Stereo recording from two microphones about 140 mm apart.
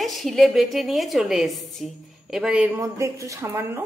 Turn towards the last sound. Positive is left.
turn(degrees=-15)  # may be behind; listen again after turning